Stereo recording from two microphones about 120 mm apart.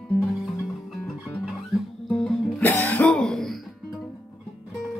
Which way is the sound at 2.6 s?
15° left (ahead or behind).